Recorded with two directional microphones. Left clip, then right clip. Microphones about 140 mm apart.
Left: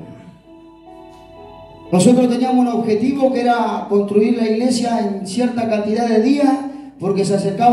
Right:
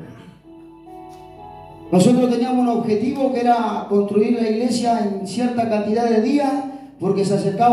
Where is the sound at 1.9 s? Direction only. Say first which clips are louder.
Left 2 dB; 30° right (ahead or behind).